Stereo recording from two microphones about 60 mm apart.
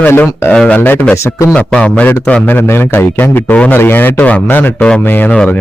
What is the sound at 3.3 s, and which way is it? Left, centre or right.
A man's voice, left.